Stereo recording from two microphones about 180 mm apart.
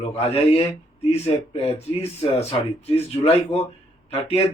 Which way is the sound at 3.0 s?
35° left (ahead or behind).